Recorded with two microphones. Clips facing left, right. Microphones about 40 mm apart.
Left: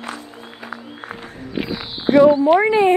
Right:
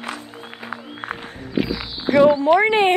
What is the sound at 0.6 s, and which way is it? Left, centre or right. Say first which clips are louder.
Music: right 2 dB; right.